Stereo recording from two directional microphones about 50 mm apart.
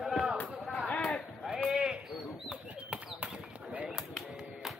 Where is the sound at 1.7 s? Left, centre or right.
Centre.